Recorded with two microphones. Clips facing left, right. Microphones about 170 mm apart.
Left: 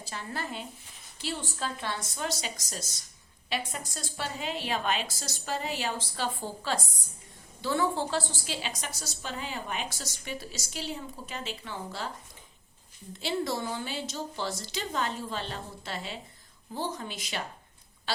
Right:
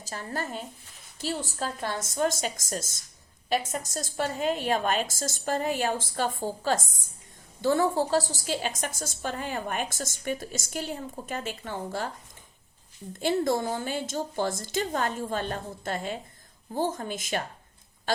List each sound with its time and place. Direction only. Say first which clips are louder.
0.0 s a woman's voice: right 3 dB; 45° right (ahead or behind)
13.1 s a woman's voice: right 6 dB; 50° right (ahead or behind)